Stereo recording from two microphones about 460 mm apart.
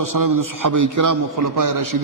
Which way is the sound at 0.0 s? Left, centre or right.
Right.